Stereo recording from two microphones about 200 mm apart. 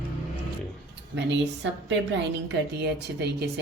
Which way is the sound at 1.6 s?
60° right (ahead or behind).